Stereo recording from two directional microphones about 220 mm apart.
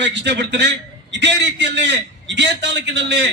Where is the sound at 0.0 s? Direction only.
55° right (ahead or behind).